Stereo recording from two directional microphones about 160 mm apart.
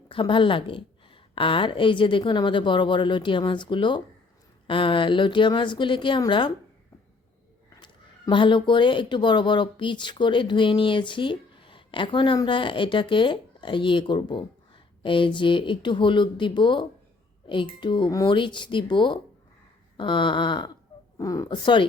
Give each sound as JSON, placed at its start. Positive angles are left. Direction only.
{"t": 0.1, "sound": "speech", "side_deg": 30}
{"t": 7.8, "sound": "speech", "side_deg": 30}